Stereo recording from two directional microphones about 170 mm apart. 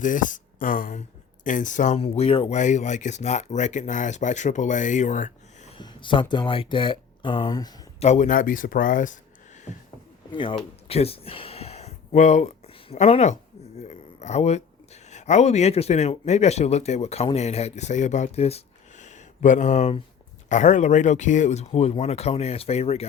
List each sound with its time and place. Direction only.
0.0 s speech: 50° left (ahead or behind)
5.7 s speech: 30° left (ahead or behind)
7.9 s speech: 40° left (ahead or behind)
10.3 s speech: 30° left (ahead or behind)
13.8 s a sound: 45° left (ahead or behind)
15.1 s speech: 40° left (ahead or behind)